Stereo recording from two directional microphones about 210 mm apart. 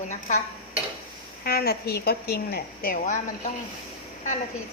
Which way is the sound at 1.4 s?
45° left (ahead or behind).